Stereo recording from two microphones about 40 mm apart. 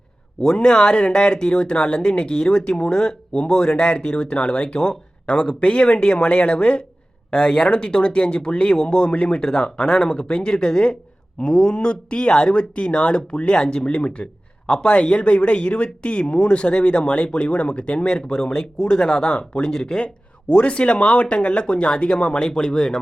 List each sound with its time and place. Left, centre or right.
0.4 s speech: centre
19.7 s speech: centre
20.5 s speech: left